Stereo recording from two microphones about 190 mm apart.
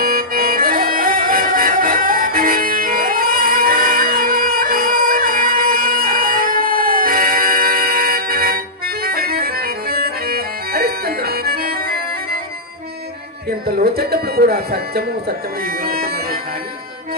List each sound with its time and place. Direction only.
0.0 s music: 50° right (ahead or behind)
13.8 s a sound: 55° right (ahead or behind)
15.6 s bagpipes: 50° right (ahead or behind)